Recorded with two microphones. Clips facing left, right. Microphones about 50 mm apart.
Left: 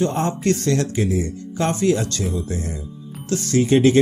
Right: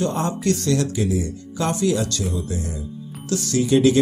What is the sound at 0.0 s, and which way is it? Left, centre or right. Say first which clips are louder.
Speech: left 2 dB; left.